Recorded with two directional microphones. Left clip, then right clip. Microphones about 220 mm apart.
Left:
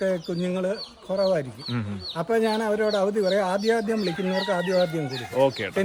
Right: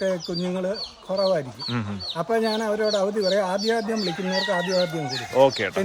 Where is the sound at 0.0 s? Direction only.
5° right (ahead or behind).